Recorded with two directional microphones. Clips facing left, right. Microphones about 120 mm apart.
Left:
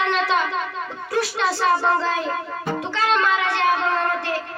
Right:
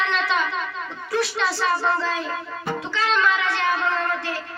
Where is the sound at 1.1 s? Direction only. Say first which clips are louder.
Left 1 dB; 45° left (ahead or behind).